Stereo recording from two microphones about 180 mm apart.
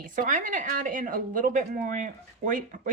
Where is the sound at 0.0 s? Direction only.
50° right (ahead or behind).